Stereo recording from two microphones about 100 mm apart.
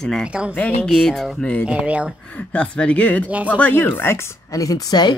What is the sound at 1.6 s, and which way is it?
Speech, 10° right (ahead or behind).